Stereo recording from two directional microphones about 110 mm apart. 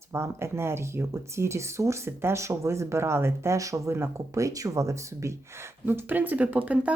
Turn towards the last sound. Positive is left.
turn(degrees=-10)  # may be behind; listen again after turning